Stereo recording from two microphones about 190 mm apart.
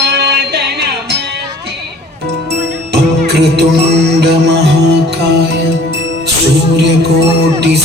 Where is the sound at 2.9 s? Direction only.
60° right (ahead or behind).